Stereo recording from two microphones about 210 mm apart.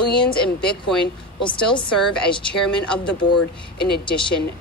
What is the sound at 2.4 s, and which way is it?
Speech, 5° left (ahead or behind).